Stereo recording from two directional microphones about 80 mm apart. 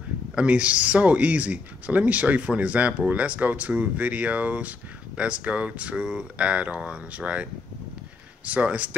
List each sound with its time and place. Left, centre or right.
0.3 s speech: centre
8.5 s speech: centre